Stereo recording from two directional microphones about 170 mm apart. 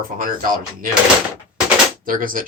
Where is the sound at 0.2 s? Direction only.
55° right (ahead or behind).